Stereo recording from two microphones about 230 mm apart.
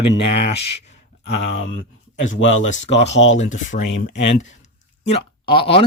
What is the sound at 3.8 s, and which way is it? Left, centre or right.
Speech, left.